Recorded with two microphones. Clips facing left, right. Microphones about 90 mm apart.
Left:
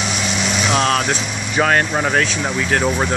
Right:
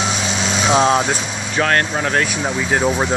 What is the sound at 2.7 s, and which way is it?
Speech, 10° right (ahead or behind).